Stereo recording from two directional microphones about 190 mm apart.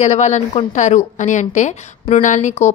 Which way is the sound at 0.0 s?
35° left (ahead or behind).